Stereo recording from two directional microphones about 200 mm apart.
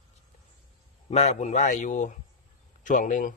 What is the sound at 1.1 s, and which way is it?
A man's voice, 35° left (ahead or behind).